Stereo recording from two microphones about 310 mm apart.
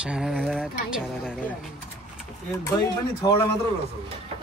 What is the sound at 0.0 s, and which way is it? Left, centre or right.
Speech, centre.